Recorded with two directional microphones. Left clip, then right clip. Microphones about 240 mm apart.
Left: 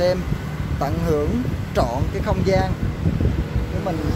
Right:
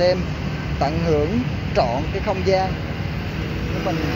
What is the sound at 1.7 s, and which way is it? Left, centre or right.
Speech, centre.